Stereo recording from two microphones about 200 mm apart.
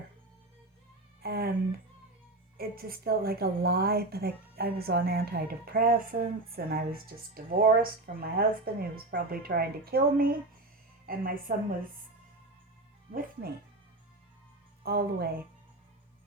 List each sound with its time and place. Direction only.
1.2 s speech: 50° right (ahead or behind)
2.6 s a woman's voice: 50° right (ahead or behind)
14.8 s a woman's voice: 50° right (ahead or behind)